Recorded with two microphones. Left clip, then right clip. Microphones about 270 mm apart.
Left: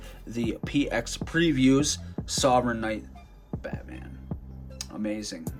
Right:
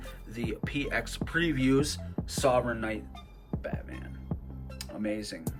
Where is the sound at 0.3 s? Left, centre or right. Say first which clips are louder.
Left 6 dB; centre.